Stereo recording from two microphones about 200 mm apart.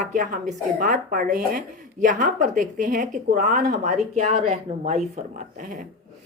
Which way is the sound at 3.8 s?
35° right (ahead or behind).